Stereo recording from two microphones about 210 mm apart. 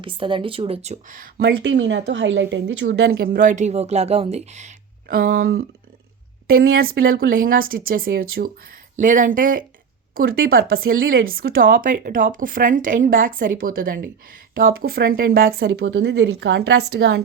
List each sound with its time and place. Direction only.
0.0 s speech: 25° right (ahead or behind); by 5.6 s 45° right (ahead or behind)
6.7 s speech: 45° right (ahead or behind)